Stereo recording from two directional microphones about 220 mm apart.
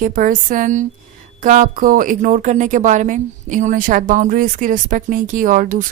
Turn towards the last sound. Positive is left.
turn(degrees=-35)  # may be behind; listen again after turning